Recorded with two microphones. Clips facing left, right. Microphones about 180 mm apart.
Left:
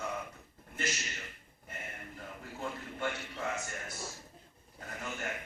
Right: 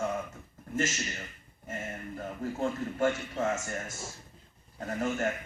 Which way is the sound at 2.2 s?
45° right (ahead or behind).